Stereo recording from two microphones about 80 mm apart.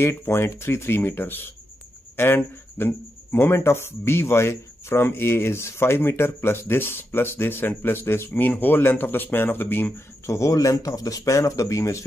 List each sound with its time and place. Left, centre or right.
0.0 s speech: left